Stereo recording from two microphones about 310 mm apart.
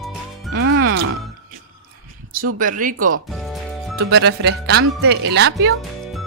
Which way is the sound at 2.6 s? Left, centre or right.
Right.